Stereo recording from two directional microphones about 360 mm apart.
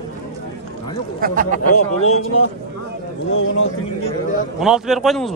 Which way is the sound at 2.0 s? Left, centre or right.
Left.